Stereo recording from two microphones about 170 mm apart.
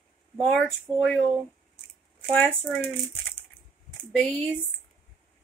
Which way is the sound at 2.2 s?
5° left (ahead or behind).